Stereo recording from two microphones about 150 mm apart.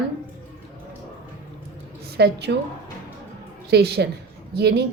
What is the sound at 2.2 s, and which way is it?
Speech, 90° right.